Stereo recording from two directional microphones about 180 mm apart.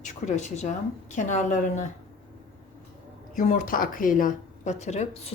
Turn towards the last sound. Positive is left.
turn(degrees=40)  # may be behind; listen again after turning